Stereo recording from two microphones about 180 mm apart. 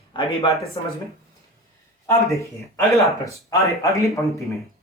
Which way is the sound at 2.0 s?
15° left (ahead or behind).